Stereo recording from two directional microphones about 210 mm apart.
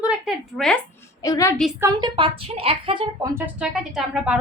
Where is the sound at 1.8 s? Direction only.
20° right (ahead or behind).